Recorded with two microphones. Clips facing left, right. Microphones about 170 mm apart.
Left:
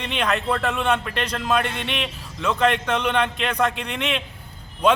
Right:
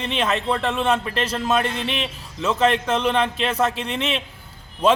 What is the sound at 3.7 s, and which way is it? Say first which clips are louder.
Speech: right 1 dB; 30° right (ahead or behind).